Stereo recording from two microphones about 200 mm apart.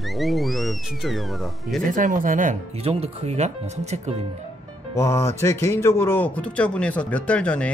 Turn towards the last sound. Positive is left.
turn(degrees=5)  # may be behind; listen again after turning